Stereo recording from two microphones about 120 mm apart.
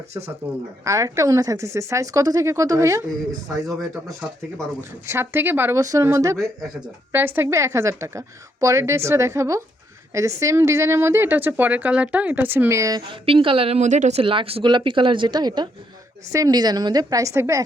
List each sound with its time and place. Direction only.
0.9 s speech: 25° right (ahead or behind)
4.8 s speech: 20° right (ahead or behind)
13.0 s a woman's voice: 45° right (ahead or behind)
13.8 s speech: 85° right
14.2 s a woman's voice: 50° right (ahead or behind); by 17.6 s 25° right (ahead or behind)